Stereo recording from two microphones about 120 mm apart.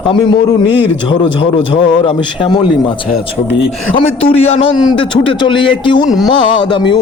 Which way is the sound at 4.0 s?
55° left (ahead or behind).